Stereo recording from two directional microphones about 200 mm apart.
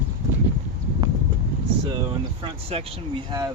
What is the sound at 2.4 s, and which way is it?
Speech, 30° right (ahead or behind).